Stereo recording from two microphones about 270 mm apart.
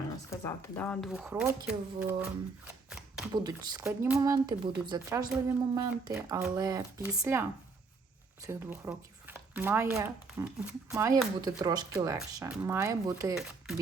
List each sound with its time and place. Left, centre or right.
0.3 s a woman's voice: centre
3.3 s speech: centre